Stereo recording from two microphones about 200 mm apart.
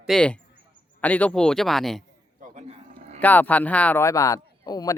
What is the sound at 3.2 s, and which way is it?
Speech, 10° left (ahead or behind).